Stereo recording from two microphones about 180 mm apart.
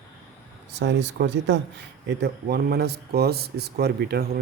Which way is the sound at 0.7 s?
75° right (ahead or behind).